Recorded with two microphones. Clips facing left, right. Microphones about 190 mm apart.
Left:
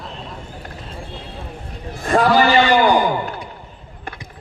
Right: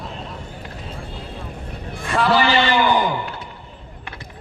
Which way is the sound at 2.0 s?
45° left (ahead or behind).